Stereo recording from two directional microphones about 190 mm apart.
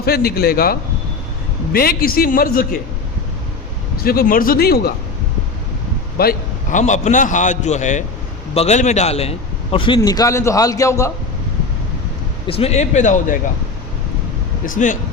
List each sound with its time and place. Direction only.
0.0 s a man's voice: 55° left (ahead or behind)
4.0 s a man's voice: 50° left (ahead or behind)
6.1 s a man's voice: 45° left (ahead or behind); by 11.1 s 15° left (ahead or behind)
12.5 s a man's voice: 30° left (ahead or behind)
14.7 s a man's voice: 40° left (ahead or behind)